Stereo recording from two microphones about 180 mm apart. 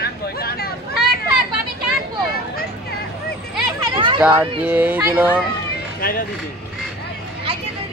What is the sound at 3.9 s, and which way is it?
Children playing, 25° right (ahead or behind).